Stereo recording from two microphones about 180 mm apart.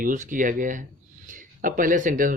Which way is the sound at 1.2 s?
50° right (ahead or behind).